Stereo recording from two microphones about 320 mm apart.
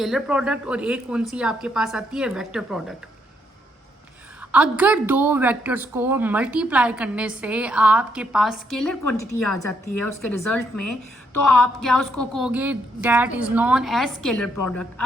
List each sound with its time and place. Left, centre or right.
0.0 s a woman's voice: centre
4.4 s a woman's voice: centre